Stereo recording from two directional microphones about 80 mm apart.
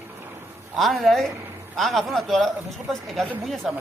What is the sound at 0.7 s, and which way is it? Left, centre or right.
Speech, centre.